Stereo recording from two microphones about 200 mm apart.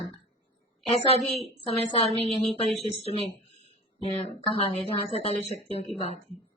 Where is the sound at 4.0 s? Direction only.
30° left (ahead or behind).